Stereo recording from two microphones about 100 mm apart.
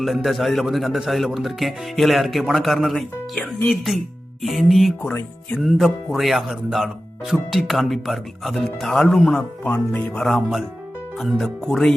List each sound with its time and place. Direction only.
0.0 s a man's voice: centre (ahead or behind)
5.0 s speech: 10° left (ahead or behind)
5.5 s a man's voice: centre (ahead or behind)
9.6 s speech: 20° left (ahead or behind)
10.2 s a man's voice: 5° left (ahead or behind)